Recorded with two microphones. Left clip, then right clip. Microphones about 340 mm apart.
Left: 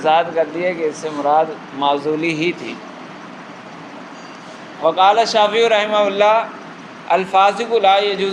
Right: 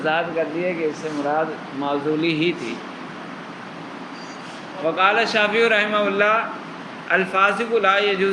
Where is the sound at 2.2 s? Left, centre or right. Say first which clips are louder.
Left 2 dB; centre.